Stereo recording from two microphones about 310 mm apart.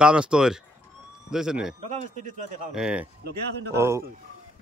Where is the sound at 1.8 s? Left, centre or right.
Right.